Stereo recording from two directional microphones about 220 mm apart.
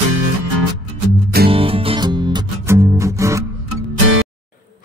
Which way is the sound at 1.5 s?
25° right (ahead or behind).